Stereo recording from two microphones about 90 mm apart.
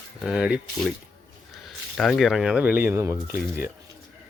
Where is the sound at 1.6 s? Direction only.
Centre (ahead or behind); by 2.9 s 20° right (ahead or behind).